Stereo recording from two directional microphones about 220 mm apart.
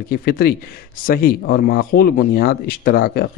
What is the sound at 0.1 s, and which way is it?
Speech, 45° left (ahead or behind).